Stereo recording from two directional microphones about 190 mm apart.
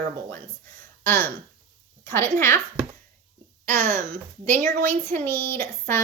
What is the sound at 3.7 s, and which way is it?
Speech, 40° right (ahead or behind).